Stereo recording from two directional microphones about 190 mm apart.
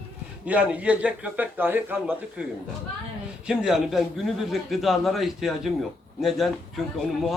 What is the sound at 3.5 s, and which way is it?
A man's voice, 5° right (ahead or behind).